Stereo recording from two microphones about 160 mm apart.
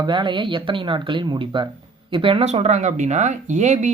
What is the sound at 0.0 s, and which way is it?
Speech, 30° right (ahead or behind).